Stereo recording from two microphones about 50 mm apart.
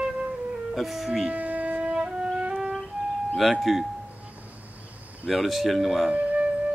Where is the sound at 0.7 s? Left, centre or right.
Centre.